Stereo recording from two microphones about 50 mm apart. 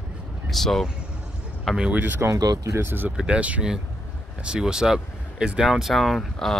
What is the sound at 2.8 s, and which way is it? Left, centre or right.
Speech, right.